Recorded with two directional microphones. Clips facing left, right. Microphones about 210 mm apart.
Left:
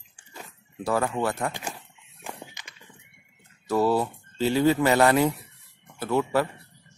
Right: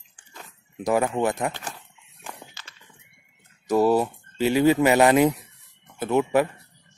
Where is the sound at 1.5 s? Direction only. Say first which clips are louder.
Left 1 dB; 10° left (ahead or behind).